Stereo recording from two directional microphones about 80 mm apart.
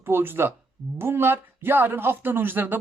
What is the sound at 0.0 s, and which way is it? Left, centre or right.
Speech, right.